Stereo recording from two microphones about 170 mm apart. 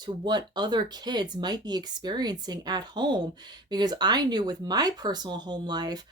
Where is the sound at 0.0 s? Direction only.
25° right (ahead or behind).